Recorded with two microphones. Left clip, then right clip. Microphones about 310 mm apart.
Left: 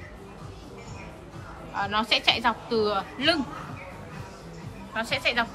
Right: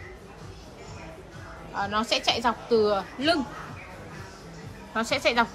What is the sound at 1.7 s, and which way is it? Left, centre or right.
A woman's voice, centre.